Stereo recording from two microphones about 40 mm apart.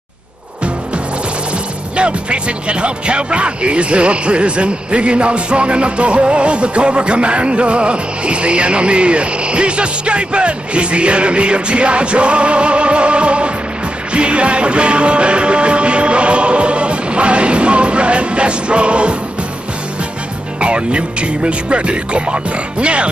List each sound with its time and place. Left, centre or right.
2.0 s speech: right
14.1 s music: right
20.6 s speech: right